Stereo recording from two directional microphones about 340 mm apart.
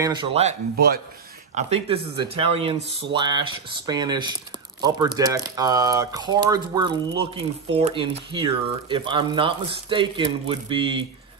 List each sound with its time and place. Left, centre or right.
0.0 s speech: centre